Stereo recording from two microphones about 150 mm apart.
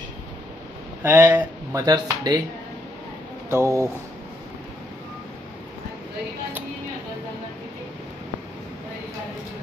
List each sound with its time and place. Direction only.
1.0 s speech: 15° right (ahead or behind)
3.4 s speech: 20° right (ahead or behind)